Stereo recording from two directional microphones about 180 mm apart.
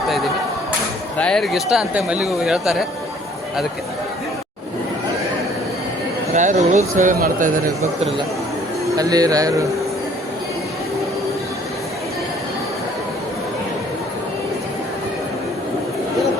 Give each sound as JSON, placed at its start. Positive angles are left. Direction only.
{"t": 1.2, "sound": "speech", "side_deg": 5}
{"t": 6.3, "sound": "speech", "side_deg": -45}
{"t": 9.0, "sound": "speech", "side_deg": -20}